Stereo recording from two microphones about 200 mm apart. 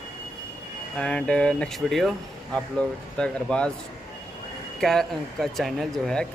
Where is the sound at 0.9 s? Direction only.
5° left (ahead or behind).